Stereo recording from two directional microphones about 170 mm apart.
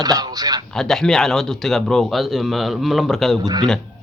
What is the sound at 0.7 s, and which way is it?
Speech, centre (ahead or behind).